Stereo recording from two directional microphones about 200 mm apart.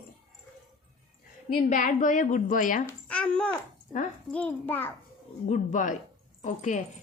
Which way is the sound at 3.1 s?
5° left (ahead or behind).